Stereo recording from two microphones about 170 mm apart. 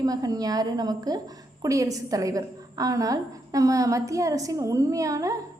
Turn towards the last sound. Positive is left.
turn(degrees=-20)  # may be behind; listen again after turning